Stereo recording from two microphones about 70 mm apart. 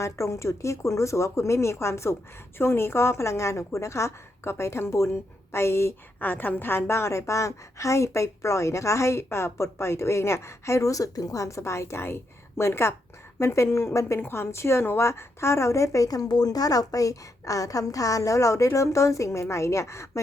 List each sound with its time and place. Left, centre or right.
0.0 s a woman's voice: left
6.1 s a woman's voice: left